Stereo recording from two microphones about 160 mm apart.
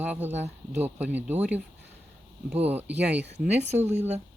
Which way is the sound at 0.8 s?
10° right (ahead or behind).